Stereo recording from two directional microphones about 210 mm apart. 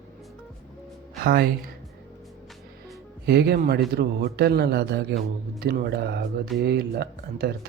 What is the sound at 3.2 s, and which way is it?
A man's voice, 50° right (ahead or behind).